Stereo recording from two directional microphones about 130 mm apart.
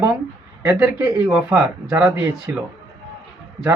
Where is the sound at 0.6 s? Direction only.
15° right (ahead or behind).